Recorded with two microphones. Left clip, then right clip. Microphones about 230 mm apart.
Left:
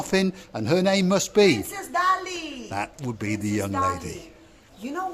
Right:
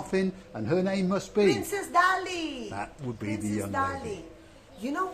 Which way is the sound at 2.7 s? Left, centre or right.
Left.